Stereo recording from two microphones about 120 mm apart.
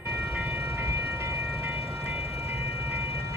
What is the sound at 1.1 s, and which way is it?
Train, 20° right (ahead or behind).